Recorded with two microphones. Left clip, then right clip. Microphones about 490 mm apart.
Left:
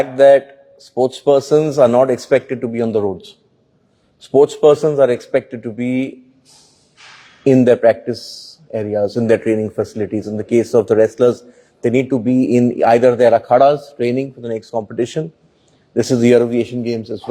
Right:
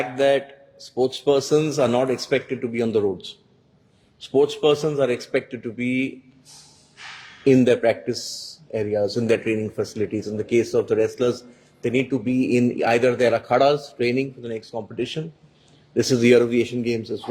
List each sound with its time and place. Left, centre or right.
0.2 s a man's voice: left
7.4 s a man's voice: left
16.0 s speech: centre